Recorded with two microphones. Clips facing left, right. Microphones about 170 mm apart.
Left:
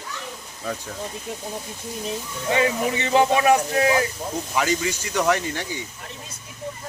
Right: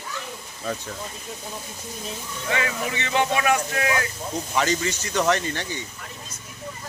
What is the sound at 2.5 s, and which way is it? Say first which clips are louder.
Speech: left 5 dB; 25° left (ahead or behind).